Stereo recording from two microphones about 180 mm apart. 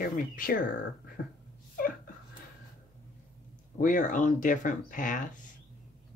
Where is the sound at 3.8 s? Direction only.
45° left (ahead or behind).